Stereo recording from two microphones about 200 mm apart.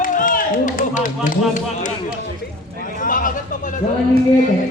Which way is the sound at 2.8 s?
40° left (ahead or behind).